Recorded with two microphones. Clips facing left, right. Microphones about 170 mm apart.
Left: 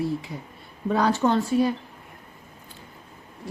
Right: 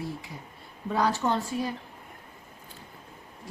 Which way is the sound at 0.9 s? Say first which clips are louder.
Left 5 dB; 65° left (ahead or behind).